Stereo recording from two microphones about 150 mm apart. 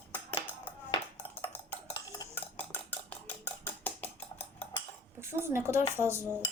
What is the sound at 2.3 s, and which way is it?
Cutlery, 10° left (ahead or behind).